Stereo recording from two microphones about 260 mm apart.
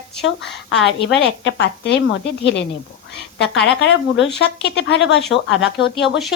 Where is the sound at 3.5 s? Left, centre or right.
Left.